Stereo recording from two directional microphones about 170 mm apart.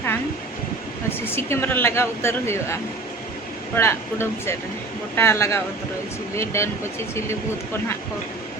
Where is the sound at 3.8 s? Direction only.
15° left (ahead or behind).